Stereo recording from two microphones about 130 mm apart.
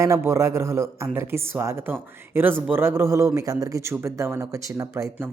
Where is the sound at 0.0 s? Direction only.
20° right (ahead or behind).